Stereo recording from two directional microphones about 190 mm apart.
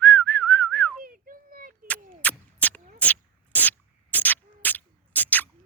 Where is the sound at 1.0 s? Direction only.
50° right (ahead or behind).